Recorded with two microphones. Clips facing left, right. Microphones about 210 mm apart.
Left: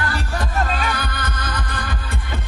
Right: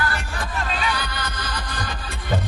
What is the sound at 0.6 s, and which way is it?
Music, 45° left (ahead or behind).